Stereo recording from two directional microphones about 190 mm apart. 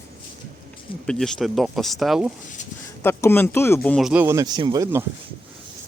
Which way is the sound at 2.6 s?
40° left (ahead or behind).